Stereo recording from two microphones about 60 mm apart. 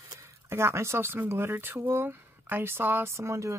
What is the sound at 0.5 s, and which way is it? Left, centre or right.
Speech, right.